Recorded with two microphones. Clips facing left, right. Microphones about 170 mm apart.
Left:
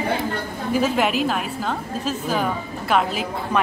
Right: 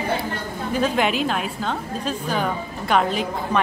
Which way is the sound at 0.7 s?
5° left (ahead or behind).